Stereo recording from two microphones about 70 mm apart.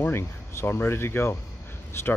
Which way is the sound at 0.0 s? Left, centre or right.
Left.